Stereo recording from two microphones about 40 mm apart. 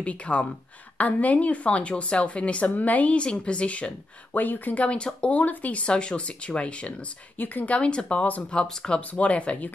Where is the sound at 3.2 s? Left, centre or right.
Left.